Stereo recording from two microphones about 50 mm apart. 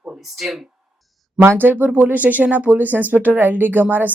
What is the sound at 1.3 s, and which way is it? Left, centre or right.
Speech, right.